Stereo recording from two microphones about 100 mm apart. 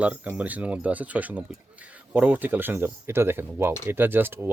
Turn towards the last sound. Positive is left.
turn(degrees=-20)  # may be behind; listen again after turning